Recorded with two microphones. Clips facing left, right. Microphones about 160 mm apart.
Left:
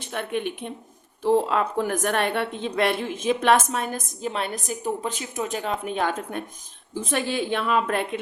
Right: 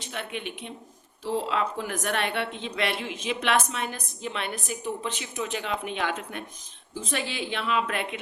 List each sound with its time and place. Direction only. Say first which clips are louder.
0.0 s a woman's voice: left 7 dB; 50° left (ahead or behind)